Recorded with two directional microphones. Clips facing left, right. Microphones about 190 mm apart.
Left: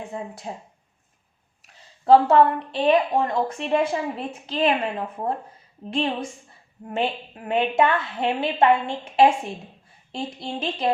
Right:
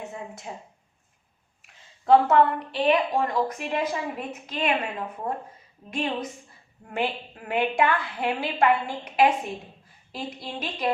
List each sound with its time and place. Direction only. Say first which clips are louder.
0.1 s speech: left 4 dB; 35° left (ahead or behind)
1.6 s a woman's voice: left 4 dB; 30° left (ahead or behind)